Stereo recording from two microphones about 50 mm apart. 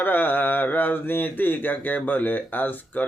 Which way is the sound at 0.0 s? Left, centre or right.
Left.